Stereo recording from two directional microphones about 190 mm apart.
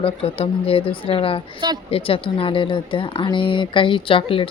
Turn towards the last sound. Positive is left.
turn(degrees=25)  # may be behind; listen again after turning